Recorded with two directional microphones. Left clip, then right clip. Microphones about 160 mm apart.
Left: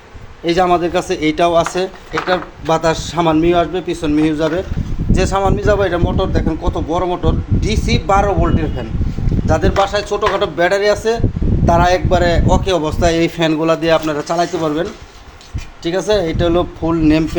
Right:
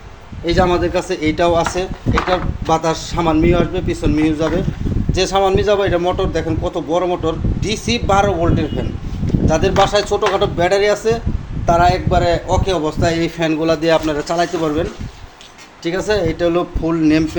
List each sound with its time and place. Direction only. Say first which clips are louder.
0.4 s a man's voice: left 2 dB; 15° left (ahead or behind)
11.9 s a man's voice: left 1 dB; 25° left (ahead or behind)
13.6 s a man's voice: even; 5° left (ahead or behind)